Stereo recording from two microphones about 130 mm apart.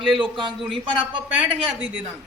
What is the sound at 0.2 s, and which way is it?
Speech, 40° right (ahead or behind).